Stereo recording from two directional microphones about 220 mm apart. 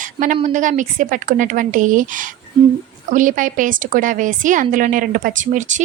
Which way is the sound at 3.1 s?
35° right (ahead or behind).